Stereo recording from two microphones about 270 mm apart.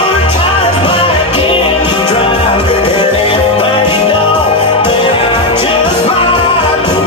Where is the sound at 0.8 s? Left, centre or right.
Centre.